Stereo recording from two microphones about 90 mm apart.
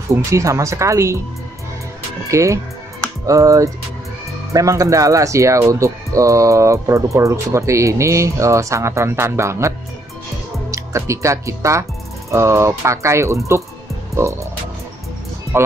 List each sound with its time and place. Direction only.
0.3 s speech: 35° right (ahead or behind)
2.3 s speech: 35° right (ahead or behind)